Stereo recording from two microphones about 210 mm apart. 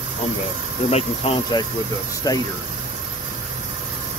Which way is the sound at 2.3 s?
15° left (ahead or behind).